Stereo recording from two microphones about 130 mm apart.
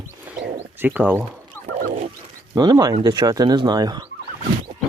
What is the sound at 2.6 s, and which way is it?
Speech, 30° right (ahead or behind).